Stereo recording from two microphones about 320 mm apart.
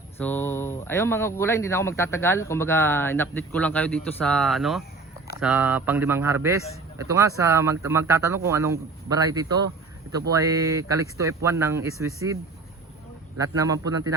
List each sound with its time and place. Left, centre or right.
0.2 s speech: centre